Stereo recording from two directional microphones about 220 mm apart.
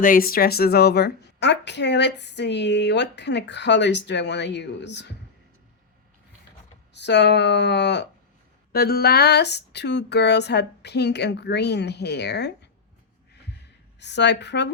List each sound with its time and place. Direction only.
0.0 s a woman's voice: 40° left (ahead or behind)
6.9 s a woman's voice: 50° left (ahead or behind)
14.0 s a woman's voice: 50° left (ahead or behind)